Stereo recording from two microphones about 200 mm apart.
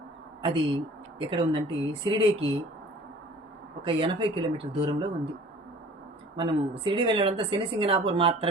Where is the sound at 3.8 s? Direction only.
25° right (ahead or behind).